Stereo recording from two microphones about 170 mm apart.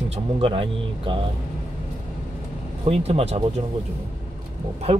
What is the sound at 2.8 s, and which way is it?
Speech, 35° right (ahead or behind).